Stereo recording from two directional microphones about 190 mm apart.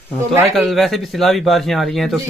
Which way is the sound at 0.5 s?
Centre (ahead or behind).